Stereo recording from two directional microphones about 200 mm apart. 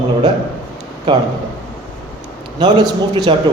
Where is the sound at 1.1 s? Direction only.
20° right (ahead or behind).